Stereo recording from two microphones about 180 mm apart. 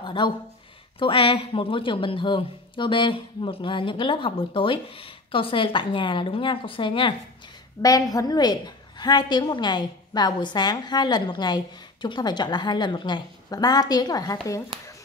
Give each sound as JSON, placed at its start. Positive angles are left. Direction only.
{"t": 0.0, "sound": "a woman's voice", "side_deg": 25}